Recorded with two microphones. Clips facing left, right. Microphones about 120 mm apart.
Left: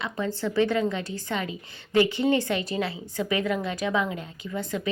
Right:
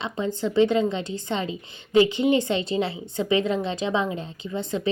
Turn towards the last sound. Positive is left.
turn(degrees=-25)  # may be behind; listen again after turning